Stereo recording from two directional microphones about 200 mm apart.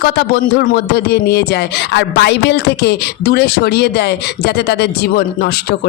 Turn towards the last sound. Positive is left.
turn(degrees=50)  # may be behind; listen again after turning